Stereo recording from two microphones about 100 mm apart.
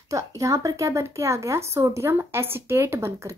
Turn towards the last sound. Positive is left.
turn(degrees=-25)  # may be behind; listen again after turning